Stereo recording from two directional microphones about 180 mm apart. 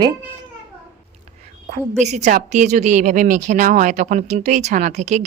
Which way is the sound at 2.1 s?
40° right (ahead or behind).